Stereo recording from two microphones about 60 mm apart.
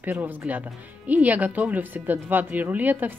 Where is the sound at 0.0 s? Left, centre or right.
Right.